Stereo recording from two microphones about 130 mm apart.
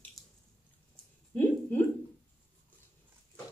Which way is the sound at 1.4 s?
15° left (ahead or behind).